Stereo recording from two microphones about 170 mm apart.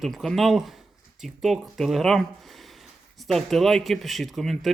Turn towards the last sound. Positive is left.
turn(degrees=0)  # may be behind; listen again after turning